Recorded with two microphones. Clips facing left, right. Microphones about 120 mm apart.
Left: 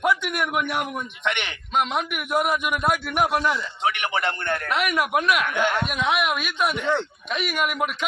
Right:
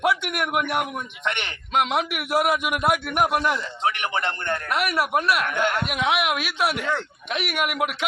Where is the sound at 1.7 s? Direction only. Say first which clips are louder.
Right 2 dB; 90° right.